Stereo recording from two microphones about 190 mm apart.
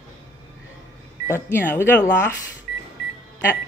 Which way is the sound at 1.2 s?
15° left (ahead or behind).